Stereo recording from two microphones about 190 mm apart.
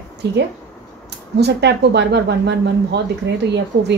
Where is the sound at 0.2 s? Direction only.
65° right (ahead or behind).